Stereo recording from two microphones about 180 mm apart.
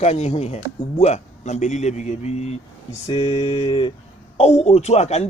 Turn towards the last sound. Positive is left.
turn(degrees=40)  # may be behind; listen again after turning